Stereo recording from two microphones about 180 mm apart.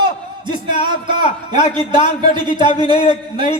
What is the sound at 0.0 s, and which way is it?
A man's voice, 25° right (ahead or behind).